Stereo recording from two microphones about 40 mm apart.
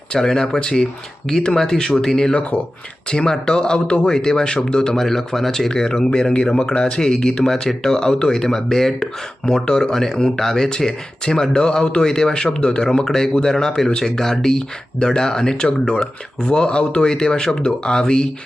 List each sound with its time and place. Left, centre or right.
0.1 s speech: centre
2.3 s speech: left
3.1 s a man's voice: left